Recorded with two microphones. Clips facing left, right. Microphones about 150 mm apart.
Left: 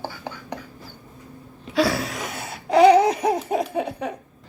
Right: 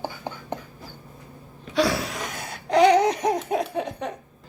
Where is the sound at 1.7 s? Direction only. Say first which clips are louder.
Left 1 dB; centre (ahead or behind).